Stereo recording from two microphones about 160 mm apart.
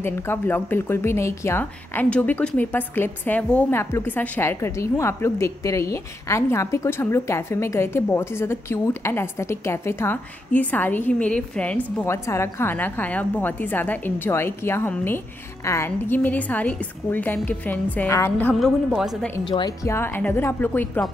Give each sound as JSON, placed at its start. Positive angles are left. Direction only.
{"t": 0.0, "sound": "a woman's voice", "side_deg": 15}
{"t": 18.5, "sound": "a woman's voice", "side_deg": 0}
{"t": 19.4, "sound": "speech", "side_deg": 30}
{"t": 19.9, "sound": "a woman's voice", "side_deg": 15}